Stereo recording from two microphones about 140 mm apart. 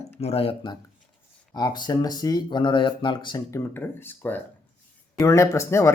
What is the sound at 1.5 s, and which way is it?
Speech, 30° left (ahead or behind).